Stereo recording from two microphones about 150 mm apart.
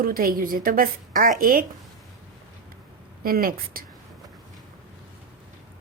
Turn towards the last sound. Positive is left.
turn(degrees=-75)  # may be behind; listen again after turning